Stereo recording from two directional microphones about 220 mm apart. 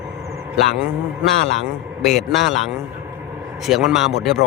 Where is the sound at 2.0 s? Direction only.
Centre (ahead or behind).